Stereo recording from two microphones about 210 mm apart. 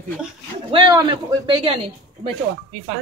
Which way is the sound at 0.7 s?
20° right (ahead or behind).